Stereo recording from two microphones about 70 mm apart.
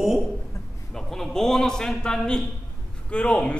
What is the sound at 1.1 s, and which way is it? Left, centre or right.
A man's voice, centre.